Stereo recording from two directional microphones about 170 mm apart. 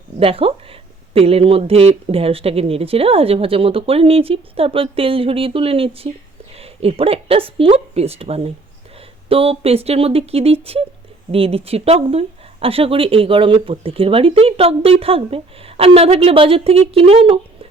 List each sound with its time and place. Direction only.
0.2 s speech: 35° right (ahead or behind)